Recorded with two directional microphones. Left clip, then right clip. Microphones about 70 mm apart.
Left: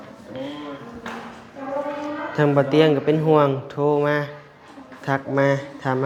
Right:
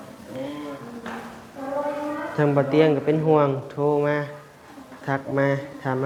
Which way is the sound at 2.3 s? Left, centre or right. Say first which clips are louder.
Left 3 dB; left.